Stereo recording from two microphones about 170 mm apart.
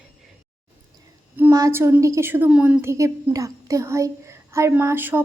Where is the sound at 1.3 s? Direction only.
15° right (ahead or behind).